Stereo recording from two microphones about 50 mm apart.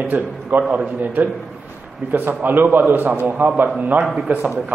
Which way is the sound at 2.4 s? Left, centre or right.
Right.